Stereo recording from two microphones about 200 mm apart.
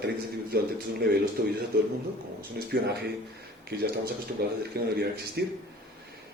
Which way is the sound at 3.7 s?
50° right (ahead or behind).